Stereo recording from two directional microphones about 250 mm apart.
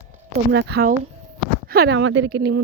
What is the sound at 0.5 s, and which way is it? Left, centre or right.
A woman's voice, right.